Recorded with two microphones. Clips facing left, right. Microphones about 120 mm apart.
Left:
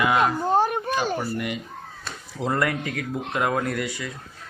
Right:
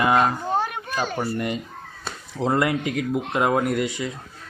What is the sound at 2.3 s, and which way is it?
Speech, 20° right (ahead or behind).